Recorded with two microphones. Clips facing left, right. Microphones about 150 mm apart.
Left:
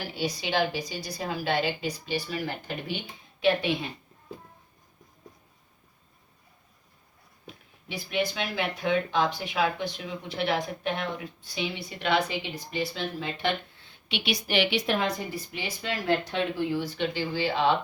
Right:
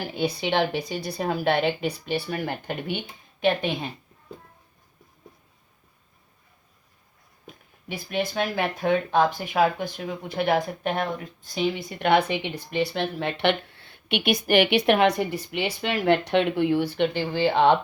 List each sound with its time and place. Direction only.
0.0 s a woman's voice: 55° right (ahead or behind)
7.4 s a woman's voice: 45° right (ahead or behind)